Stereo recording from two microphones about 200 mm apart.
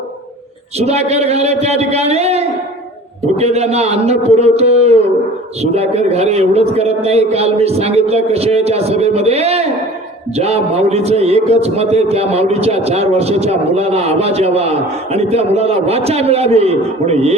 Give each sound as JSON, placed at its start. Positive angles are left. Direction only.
{"t": 0.8, "sound": "a man's voice", "side_deg": -30}